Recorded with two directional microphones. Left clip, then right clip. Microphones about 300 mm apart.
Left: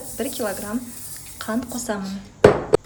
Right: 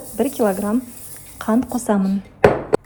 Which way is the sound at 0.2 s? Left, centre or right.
Centre.